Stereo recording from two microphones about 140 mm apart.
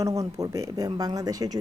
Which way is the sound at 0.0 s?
25° right (ahead or behind).